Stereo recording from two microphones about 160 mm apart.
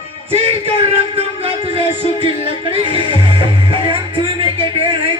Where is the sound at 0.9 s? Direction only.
35° right (ahead or behind).